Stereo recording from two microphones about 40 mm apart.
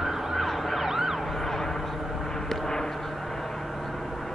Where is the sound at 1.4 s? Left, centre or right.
Centre.